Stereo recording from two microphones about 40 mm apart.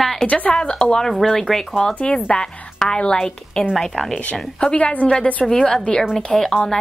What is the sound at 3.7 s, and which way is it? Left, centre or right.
Speech, centre.